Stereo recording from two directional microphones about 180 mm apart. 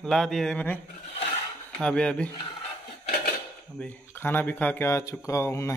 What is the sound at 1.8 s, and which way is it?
Speech, 5° left (ahead or behind).